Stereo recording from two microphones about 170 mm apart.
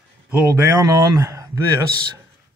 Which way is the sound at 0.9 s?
20° right (ahead or behind).